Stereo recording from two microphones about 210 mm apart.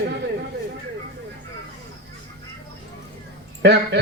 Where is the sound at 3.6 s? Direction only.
55° right (ahead or behind).